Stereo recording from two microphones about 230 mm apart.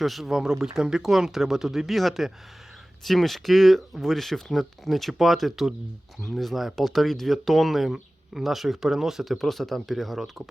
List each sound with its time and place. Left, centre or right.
0.0 s speech: centre